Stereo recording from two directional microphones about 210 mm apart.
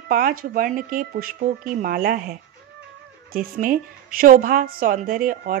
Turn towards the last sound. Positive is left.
turn(degrees=-40)  # may be behind; listen again after turning